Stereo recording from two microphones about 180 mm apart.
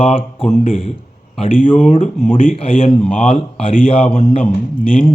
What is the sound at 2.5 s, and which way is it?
Speech, 30° left (ahead or behind).